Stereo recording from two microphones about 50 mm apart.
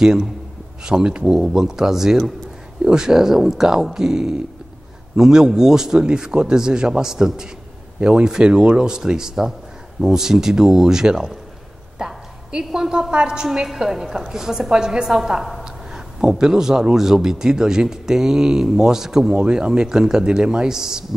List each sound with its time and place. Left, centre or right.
0.0 s a man's voice: centre
13.5 s a woman's voice: centre
19.3 s a man's voice: centre